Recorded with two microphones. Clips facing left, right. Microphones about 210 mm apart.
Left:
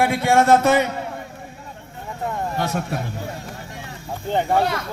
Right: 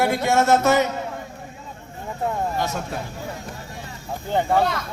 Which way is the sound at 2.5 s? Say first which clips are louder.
Left 2 dB; 60° left (ahead or behind).